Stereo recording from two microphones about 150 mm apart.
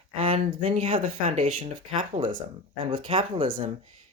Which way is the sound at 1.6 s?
35° right (ahead or behind).